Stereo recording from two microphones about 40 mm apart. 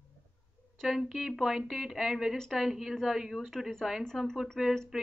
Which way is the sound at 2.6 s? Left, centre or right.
Centre.